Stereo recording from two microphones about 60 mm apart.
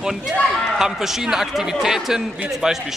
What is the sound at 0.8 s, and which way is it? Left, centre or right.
A man's voice, centre.